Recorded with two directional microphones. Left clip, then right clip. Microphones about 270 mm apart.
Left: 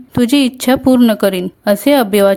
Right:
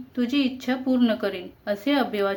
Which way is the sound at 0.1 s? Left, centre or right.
Left.